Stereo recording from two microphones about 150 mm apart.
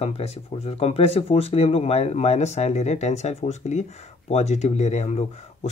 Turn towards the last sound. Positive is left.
turn(degrees=45)  # may be behind; listen again after turning